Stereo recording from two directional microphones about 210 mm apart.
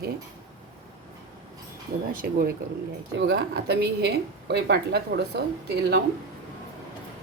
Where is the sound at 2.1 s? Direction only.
45° right (ahead or behind).